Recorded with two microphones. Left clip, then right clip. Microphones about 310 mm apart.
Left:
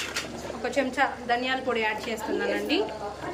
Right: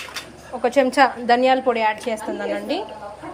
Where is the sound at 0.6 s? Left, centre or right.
Centre.